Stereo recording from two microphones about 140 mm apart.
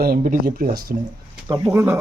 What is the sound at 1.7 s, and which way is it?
Speech, 20° right (ahead or behind).